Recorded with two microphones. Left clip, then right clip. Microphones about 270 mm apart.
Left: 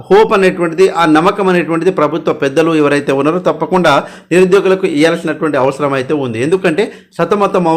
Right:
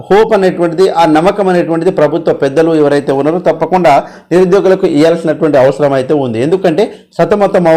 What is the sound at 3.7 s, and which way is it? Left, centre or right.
Speech, left.